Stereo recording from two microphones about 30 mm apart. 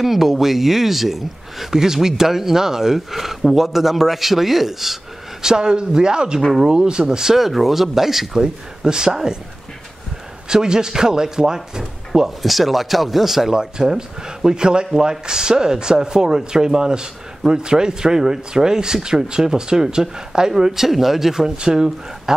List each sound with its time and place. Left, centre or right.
0.0 s speech: centre
1.7 s speech: centre
5.4 s speech: right
7.3 s speech: centre
8.4 s speech: right
10.5 s speech: right
12.4 s speech: centre
13.5 s speech: right